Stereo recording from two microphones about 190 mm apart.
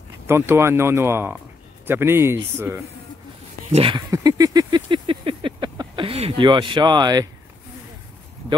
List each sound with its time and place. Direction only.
0.3 s speech: 15° right (ahead or behind)
3.7 s speech: 30° right (ahead or behind)
4.1 s a sound: 20° right (ahead or behind)